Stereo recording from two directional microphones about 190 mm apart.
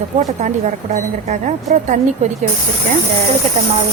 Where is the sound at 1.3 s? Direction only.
40° right (ahead or behind).